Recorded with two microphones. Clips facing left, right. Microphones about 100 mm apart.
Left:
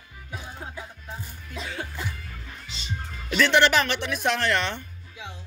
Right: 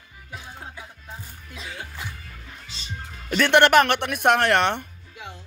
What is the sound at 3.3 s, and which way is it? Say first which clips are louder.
Speech: right 3 dB; 55° right (ahead or behind).